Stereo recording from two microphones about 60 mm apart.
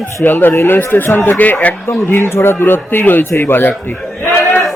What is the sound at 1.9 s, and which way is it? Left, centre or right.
Speech, left.